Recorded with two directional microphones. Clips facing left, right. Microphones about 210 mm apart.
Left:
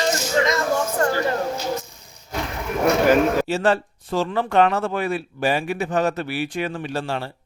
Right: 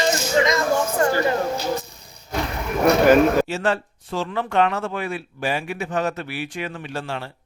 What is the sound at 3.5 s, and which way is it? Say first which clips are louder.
Speech: left 3 dB; 35° left (ahead or behind).